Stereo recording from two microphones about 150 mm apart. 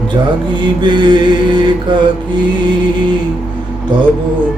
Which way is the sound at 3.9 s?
30° right (ahead or behind).